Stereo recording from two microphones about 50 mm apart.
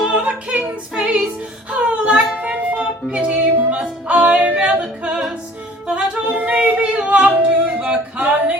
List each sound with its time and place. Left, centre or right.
0.1 s female singing: centre
1.7 s music: right
3.2 s music: right
5.9 s yodeling: right
7.0 s singing: right